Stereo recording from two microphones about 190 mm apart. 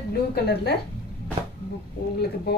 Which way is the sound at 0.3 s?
55° left (ahead or behind).